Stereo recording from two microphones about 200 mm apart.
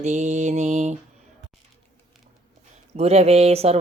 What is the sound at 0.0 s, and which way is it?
Speech, 35° right (ahead or behind).